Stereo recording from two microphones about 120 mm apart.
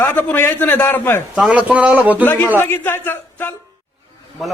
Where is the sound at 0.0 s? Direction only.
15° left (ahead or behind).